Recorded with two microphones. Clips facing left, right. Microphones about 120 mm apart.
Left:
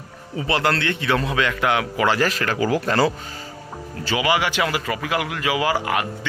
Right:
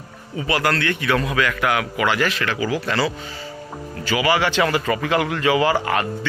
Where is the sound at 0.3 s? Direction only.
30° left (ahead or behind); by 3.1 s 45° left (ahead or behind).